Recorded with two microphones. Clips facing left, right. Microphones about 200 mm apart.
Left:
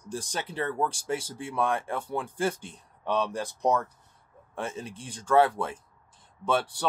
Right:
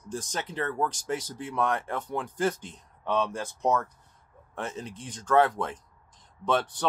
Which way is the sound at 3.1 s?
35° left (ahead or behind).